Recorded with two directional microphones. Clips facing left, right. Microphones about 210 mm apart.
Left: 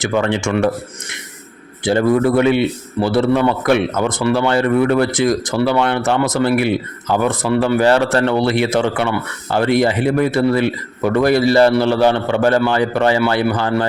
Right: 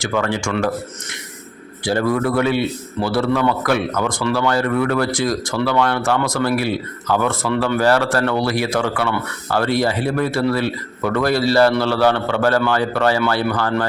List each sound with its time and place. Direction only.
0.0 s speech: 20° left (ahead or behind)
1.8 s a man's voice: 20° left (ahead or behind)